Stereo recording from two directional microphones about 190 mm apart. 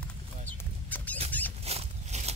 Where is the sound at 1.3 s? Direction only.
10° left (ahead or behind).